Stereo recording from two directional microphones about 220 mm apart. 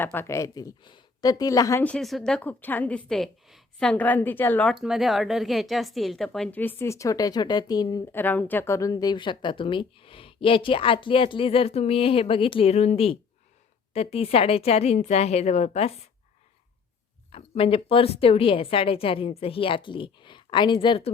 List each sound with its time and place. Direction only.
0.0 s a woman's voice: 10° left (ahead or behind); by 15.9 s 30° left (ahead or behind)
17.3 s a woman's voice: 25° left (ahead or behind)